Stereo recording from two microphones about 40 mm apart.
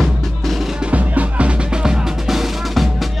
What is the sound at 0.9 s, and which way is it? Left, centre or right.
Music, right.